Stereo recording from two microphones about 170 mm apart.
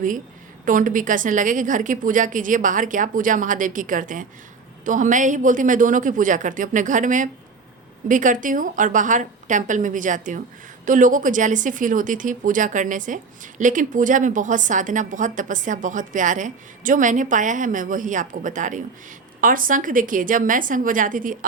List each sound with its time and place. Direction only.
0.6 s speech: 50° right (ahead or behind)